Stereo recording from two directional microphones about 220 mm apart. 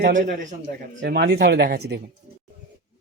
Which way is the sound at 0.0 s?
35° right (ahead or behind).